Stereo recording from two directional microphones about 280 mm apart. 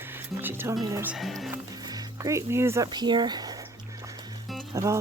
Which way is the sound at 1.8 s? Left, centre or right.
Centre.